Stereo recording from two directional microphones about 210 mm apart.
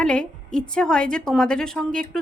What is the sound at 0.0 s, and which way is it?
A woman's voice, 5° left (ahead or behind).